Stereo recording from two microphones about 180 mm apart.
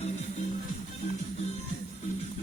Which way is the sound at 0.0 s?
40° left (ahead or behind).